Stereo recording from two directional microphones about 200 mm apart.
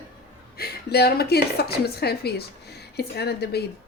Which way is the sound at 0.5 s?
50° left (ahead or behind).